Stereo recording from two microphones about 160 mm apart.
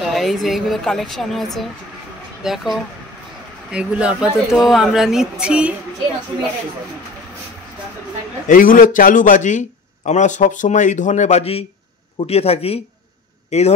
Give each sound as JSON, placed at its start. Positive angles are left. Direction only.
{"t": 0.0, "sound": "speech", "side_deg": 0}
{"t": 8.5, "sound": "a man's voice", "side_deg": 60}